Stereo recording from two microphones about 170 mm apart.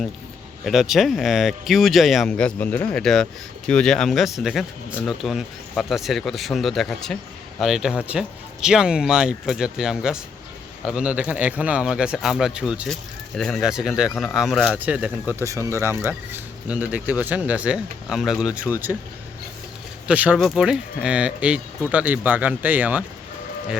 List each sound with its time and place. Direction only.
0.6 s speech: centre (ahead or behind)
20.1 s speech: 5° right (ahead or behind)